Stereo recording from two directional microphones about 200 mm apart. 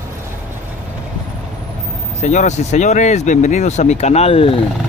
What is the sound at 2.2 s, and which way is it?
Speech, 35° left (ahead or behind).